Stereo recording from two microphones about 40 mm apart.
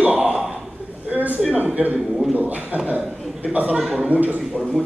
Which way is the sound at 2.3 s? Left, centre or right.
Right.